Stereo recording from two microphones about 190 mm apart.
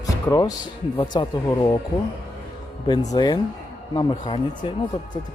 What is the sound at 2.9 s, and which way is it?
Speech, 20° left (ahead or behind).